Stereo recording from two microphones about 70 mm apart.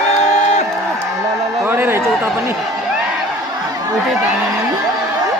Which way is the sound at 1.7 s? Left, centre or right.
Right.